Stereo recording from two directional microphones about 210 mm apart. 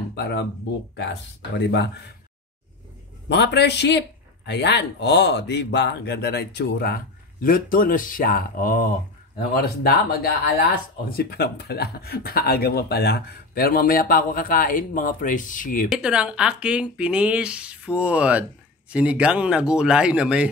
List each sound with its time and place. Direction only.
0.1 s speech: 50° left (ahead or behind)
1.6 s a man's voice: 55° left (ahead or behind)
3.3 s a man's voice: 55° left (ahead or behind)
15.9 s speech: 5° right (ahead or behind)